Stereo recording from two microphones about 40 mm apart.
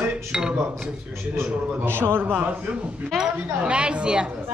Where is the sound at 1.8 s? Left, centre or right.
Right.